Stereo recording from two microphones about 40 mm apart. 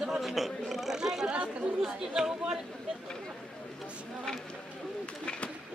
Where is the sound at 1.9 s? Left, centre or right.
Centre.